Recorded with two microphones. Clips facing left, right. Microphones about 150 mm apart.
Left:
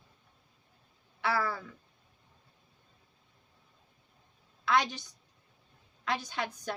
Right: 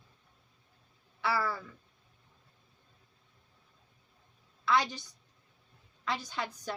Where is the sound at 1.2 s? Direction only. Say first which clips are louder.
Left 1 dB; 55° left (ahead or behind).